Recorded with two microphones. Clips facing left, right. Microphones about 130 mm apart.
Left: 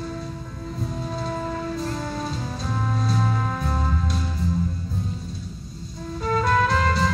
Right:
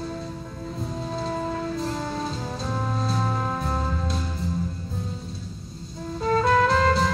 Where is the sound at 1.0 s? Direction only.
25° right (ahead or behind).